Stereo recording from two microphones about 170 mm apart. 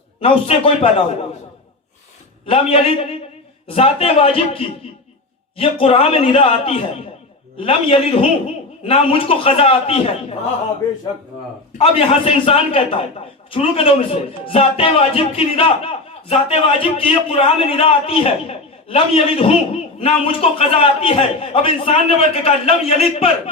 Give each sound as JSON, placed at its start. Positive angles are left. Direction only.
{"t": 0.2, "sound": "a man's voice", "side_deg": 35}
{"t": 2.5, "sound": "a man's voice", "side_deg": 35}
{"t": 11.8, "sound": "a man's voice", "side_deg": 35}